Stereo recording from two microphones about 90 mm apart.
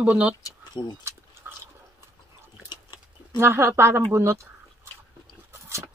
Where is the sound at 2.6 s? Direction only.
50° left (ahead or behind).